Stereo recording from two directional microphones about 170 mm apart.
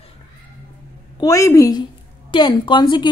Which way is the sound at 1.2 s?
20° left (ahead or behind).